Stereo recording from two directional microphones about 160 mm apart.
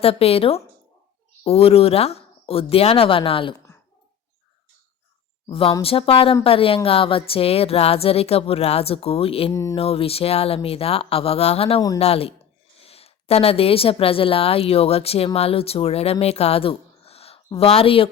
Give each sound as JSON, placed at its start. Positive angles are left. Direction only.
{"t": 0.0, "sound": "a woman's voice", "side_deg": 40}
{"t": 5.5, "sound": "a woman's voice", "side_deg": 35}
{"t": 9.5, "sound": "speech", "side_deg": 20}
{"t": 9.7, "sound": "a woman's voice", "side_deg": 35}
{"t": 16.2, "sound": "a sound", "side_deg": 40}
{"t": 17.6, "sound": "a woman's voice", "side_deg": 35}